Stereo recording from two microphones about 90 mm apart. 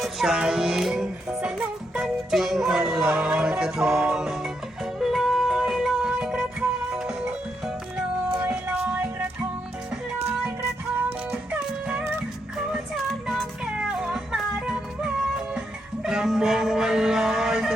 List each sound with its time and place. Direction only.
0.0 s music: 5° right (ahead or behind)
8.4 s music: 20° right (ahead or behind)
11.3 s music: 15° right (ahead or behind)
13.2 s music: centre (ahead or behind)